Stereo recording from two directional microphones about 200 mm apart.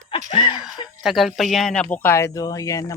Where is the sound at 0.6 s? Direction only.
Centre (ahead or behind).